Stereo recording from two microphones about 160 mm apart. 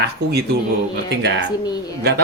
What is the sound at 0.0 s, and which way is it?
A man's voice, 90° right.